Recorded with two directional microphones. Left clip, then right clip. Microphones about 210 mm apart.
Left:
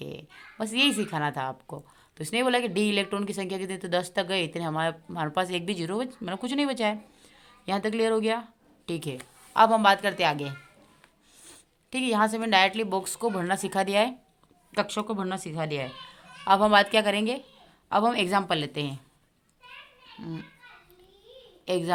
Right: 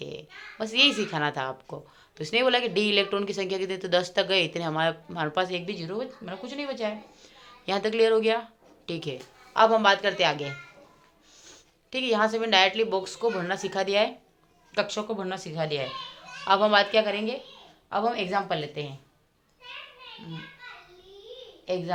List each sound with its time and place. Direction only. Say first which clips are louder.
0.0 s speech: right 2 dB; 30° left (ahead or behind)
7.4 s a woman's voice: right 2 dB; 25° left (ahead or behind); by 18.9 s 50° left (ahead or behind)
21.7 s speech: left 2 dB; 50° left (ahead or behind)